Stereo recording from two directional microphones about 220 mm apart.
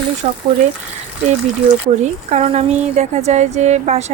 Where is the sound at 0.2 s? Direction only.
30° right (ahead or behind).